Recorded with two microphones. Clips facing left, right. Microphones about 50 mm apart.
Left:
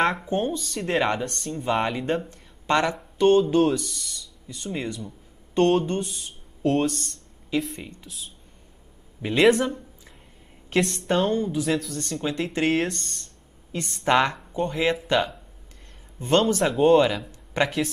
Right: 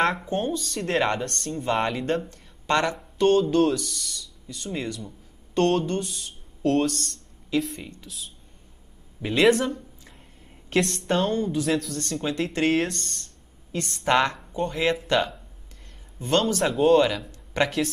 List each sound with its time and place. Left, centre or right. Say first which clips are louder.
0.0 s speech: left 1 dB; centre
0.5 s speech: even; centre
2.2 s a sound: left 1 dB; left
3.2 s speech: left 1 dB; left
4.6 s speech: left 1 dB; centre
4.9 s a sound: left 2 dB; left
5.9 s speech: even; left
9.2 s speech: left 1 dB; centre
11.9 s speech: even; centre
12.9 s speech: right 1 dB; centre
14.5 s speech: left 1 dB; centre
16.2 s speech: left 2 dB; left
16.6 s speech: right 1 dB; centre
17.6 s speech: even; left